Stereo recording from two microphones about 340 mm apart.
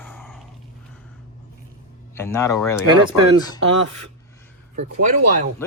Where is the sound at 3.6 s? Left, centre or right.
Right.